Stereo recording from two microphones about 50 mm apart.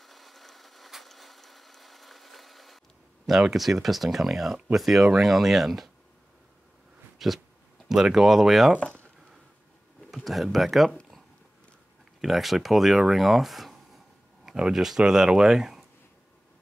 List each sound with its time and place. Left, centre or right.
0.0 s a sound: centre
3.3 s speech: centre
7.2 s a sound: centre
7.9 s speech: centre
8.7 s speech: left
10.1 s speech: centre
12.2 s speech: centre